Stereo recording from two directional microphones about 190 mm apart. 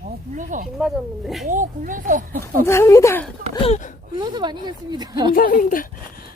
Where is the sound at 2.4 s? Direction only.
15° left (ahead or behind).